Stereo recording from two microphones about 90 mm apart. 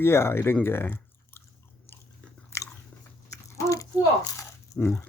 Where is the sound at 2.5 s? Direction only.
30° left (ahead or behind).